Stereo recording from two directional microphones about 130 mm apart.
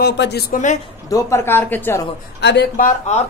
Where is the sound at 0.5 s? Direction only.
75° left (ahead or behind).